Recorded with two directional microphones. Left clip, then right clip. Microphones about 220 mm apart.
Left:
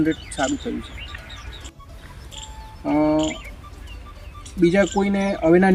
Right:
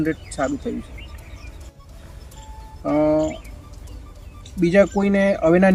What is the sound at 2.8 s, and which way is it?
Speech, 15° right (ahead or behind).